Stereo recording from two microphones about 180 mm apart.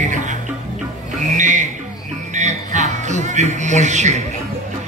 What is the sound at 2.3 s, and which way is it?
Music, 40° right (ahead or behind).